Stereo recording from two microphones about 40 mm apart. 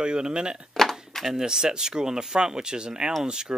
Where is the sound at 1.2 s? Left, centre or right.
Centre.